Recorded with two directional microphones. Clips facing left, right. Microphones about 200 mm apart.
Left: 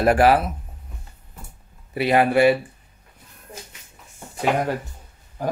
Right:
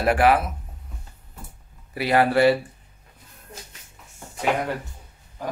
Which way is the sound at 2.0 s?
20° left (ahead or behind).